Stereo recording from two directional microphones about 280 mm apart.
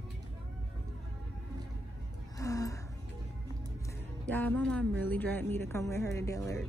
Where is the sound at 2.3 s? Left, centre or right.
Centre.